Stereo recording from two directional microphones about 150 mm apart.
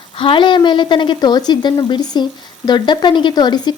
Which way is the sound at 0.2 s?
35° left (ahead or behind).